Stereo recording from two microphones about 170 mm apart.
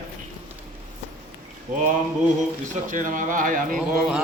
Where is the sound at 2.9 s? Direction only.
50° right (ahead or behind).